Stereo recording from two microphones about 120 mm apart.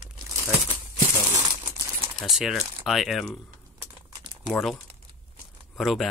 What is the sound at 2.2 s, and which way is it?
Speech, 5° right (ahead or behind).